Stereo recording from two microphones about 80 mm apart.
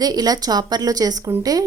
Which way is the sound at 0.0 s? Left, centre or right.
Right.